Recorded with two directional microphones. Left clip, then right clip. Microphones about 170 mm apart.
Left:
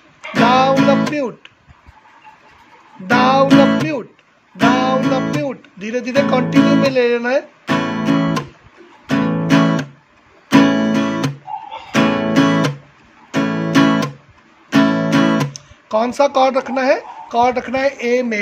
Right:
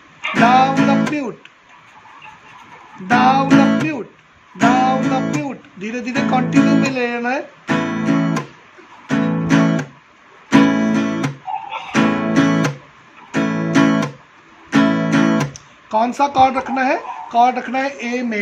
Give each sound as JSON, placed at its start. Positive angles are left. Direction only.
{"t": 0.3, "sound": "music", "side_deg": 65}
{"t": 3.1, "sound": "music", "side_deg": 65}
{"t": 14.7, "sound": "guitar", "side_deg": 70}